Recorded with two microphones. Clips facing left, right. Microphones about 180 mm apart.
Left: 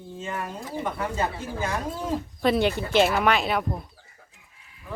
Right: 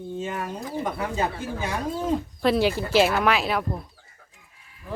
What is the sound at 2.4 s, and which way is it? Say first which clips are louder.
A woman's voice: right 1 dB; centre (ahead or behind).